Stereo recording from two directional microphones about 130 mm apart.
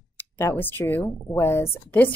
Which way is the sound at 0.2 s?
15° left (ahead or behind).